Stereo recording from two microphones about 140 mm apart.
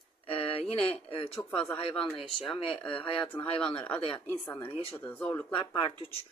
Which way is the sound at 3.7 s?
10° left (ahead or behind).